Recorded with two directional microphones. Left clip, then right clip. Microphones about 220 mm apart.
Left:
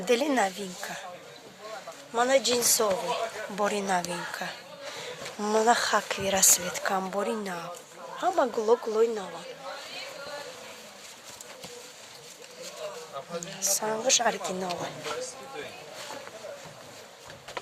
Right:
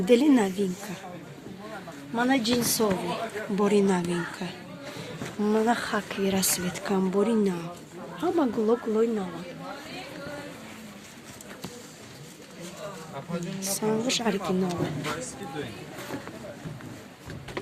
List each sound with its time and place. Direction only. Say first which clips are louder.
0.0 s speech: right 3 dB; 45° left (ahead or behind)
2.1 s speech: left 2 dB; 45° left (ahead or behind)
13.7 s a woman's voice: left 1 dB; 35° left (ahead or behind)